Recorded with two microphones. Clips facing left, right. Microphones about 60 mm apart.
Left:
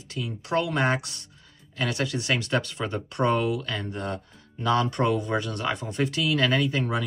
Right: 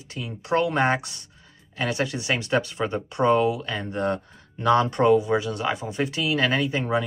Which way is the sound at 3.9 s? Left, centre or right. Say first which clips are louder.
Right 6 dB; right.